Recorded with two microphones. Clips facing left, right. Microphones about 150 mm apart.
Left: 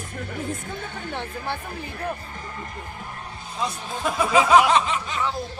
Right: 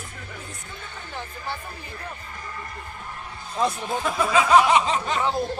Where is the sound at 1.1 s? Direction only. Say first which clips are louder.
Left 3 dB; 65° left (ahead or behind).